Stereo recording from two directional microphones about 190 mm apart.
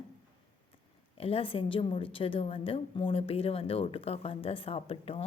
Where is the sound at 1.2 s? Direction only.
30° left (ahead or behind).